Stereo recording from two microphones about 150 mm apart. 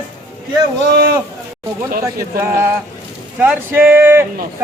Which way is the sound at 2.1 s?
15° right (ahead or behind).